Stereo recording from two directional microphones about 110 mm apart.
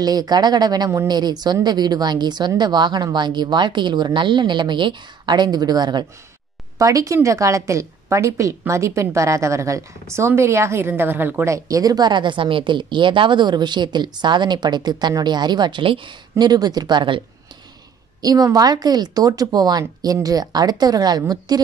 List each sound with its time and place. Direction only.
0.0 s a woman's voice: 35° right (ahead or behind); by 11.5 s 15° right (ahead or behind)
11.5 s a woman's voice: 30° right (ahead or behind)
18.2 s a woman's voice: 35° right (ahead or behind)